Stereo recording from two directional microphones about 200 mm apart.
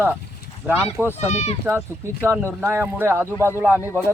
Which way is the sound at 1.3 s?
35° left (ahead or behind).